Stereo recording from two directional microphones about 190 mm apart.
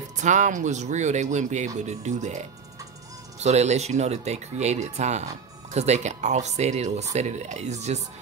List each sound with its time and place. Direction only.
0.2 s speech: 40° right (ahead or behind)